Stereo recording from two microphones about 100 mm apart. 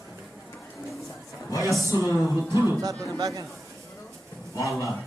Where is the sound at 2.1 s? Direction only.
30° right (ahead or behind).